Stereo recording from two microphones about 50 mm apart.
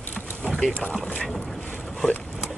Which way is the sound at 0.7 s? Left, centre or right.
Left.